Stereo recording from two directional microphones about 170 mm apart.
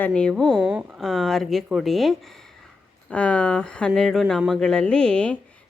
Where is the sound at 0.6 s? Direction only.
10° right (ahead or behind).